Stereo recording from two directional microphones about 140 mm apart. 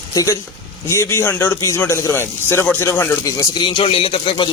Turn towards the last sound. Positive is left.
turn(degrees=35)  # may be behind; listen again after turning